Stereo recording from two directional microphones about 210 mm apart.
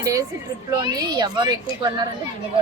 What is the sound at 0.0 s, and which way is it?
A child's voice, 15° right (ahead or behind).